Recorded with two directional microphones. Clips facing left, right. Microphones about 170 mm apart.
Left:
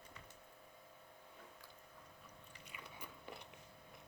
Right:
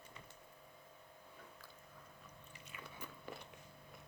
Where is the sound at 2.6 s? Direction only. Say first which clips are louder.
Right 2 dB; 15° left (ahead or behind).